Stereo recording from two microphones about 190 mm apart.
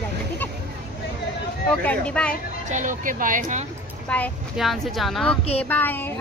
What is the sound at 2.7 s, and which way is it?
Speech, 40° right (ahead or behind).